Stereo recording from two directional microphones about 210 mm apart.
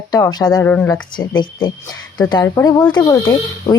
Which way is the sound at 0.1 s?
20° left (ahead or behind).